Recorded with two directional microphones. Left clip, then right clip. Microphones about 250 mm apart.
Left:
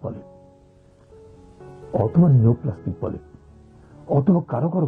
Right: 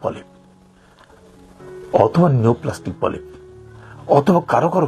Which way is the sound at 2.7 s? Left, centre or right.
Centre.